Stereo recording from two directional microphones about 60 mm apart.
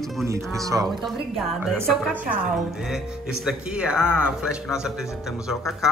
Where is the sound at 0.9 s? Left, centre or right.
Centre.